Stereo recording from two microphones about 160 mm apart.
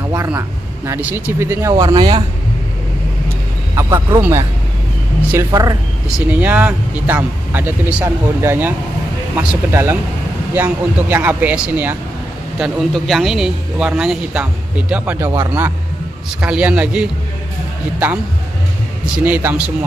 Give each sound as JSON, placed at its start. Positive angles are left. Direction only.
{"t": 0.1, "sound": "a man's voice", "side_deg": -15}
{"t": 3.7, "sound": "a man's voice", "side_deg": -20}
{"t": 5.5, "sound": "speech", "side_deg": -25}
{"t": 6.0, "sound": "a man's voice", "side_deg": -5}
{"t": 19.1, "sound": "a man's voice", "side_deg": -10}